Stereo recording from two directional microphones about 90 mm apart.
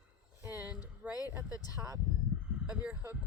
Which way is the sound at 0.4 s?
20° right (ahead or behind).